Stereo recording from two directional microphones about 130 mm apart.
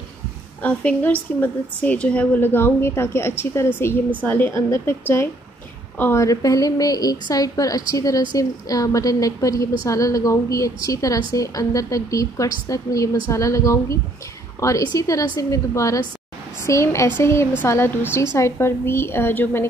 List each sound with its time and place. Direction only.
0.6 s a woman's voice: 10° left (ahead or behind)